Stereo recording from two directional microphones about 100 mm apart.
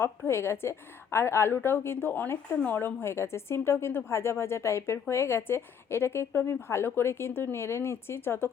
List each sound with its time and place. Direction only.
0.0 s a woman's voice: 25° left (ahead or behind)